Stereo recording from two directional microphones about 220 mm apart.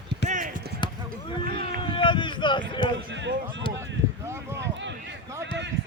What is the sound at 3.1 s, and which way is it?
Speech, 55° right (ahead or behind).